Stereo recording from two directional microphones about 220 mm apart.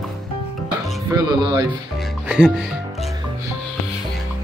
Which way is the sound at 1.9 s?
Centre (ahead or behind).